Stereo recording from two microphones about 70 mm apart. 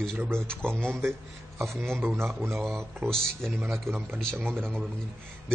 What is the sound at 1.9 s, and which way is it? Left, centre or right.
Speech, right.